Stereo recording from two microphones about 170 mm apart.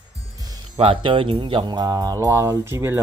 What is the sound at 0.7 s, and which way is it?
Speech, 30° right (ahead or behind).